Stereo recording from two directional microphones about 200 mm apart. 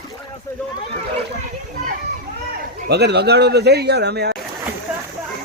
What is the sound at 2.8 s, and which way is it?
A man's voice, 55° right (ahead or behind).